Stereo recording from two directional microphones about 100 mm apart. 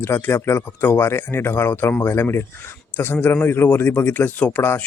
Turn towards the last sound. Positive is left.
turn(degrees=20)  # may be behind; listen again after turning